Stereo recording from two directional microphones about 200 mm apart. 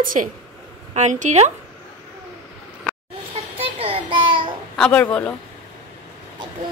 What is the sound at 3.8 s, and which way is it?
Child singing, 25° right (ahead or behind).